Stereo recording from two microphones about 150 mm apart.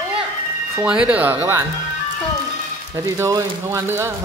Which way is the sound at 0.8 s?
5° right (ahead or behind).